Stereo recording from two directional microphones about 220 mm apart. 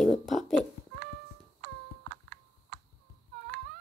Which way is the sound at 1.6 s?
50° right (ahead or behind).